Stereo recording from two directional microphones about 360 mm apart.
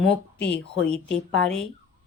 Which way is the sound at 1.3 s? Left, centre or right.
Centre.